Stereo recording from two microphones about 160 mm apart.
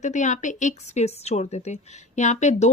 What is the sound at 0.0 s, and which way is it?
A woman's voice, 50° left (ahead or behind).